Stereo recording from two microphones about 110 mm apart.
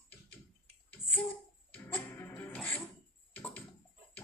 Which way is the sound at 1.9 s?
15° left (ahead or behind).